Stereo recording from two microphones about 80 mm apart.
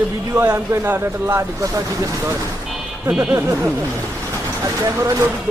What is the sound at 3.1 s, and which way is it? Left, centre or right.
Speech, centre.